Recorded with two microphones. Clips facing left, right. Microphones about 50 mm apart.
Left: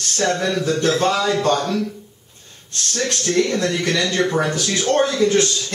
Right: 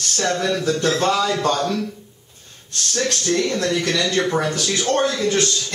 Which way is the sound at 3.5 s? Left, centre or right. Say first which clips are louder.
Left 1 dB; centre.